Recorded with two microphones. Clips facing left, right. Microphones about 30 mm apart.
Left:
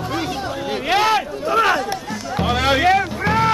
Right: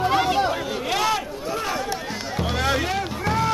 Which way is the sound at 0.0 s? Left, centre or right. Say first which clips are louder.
Right 4 dB; centre.